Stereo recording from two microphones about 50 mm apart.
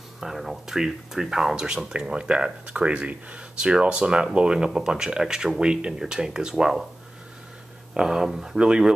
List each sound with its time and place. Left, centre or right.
0.2 s speech: centre
7.9 s speech: centre